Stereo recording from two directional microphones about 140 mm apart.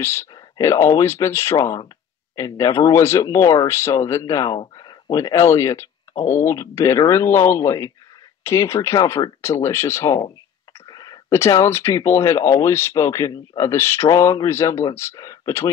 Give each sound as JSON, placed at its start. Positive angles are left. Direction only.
{"t": 0.0, "sound": "speech", "side_deg": 20}
{"t": 4.6, "sound": "speech", "side_deg": 35}